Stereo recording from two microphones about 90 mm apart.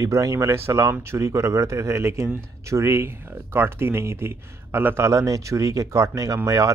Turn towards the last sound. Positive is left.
turn(degrees=-35)  # may be behind; listen again after turning